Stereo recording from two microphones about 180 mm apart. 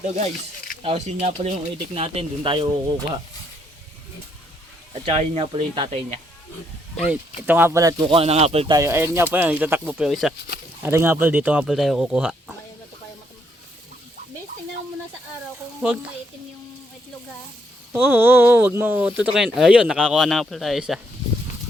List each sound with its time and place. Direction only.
0.8 s speech: 35° right (ahead or behind)
5.0 s speech: 35° right (ahead or behind)
6.9 s speech: 5° right (ahead or behind)
8.0 s speech: 30° right (ahead or behind)
8.7 s speech: 15° right (ahead or behind); by 10.3 s centre (ahead or behind)
10.8 s speech: 15° right (ahead or behind)
15.8 s speech: 5° right (ahead or behind)
17.9 s speech: 10° right (ahead or behind)